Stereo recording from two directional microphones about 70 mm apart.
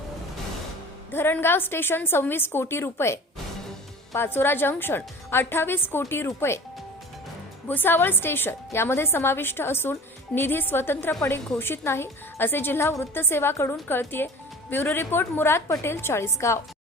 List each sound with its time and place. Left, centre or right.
1.1 s a woman's voice: left
7.7 s a woman's voice: left